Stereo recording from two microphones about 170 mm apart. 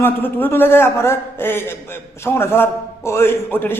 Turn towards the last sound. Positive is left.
turn(degrees=10)  # may be behind; listen again after turning